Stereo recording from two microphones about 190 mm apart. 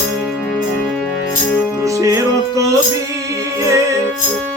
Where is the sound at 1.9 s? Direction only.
15° right (ahead or behind).